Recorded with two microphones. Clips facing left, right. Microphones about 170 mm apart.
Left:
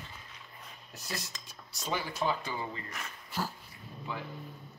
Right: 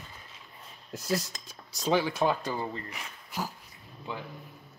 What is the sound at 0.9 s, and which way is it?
Speech, 90° right.